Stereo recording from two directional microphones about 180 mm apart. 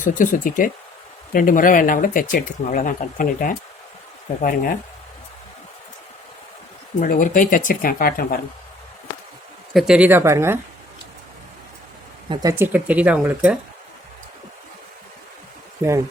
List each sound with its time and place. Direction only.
0.0 s speech: 45° left (ahead or behind)
7.0 s speech: 45° left (ahead or behind)
9.7 s speech: 5° right (ahead or behind)
12.3 s speech: 20° right (ahead or behind)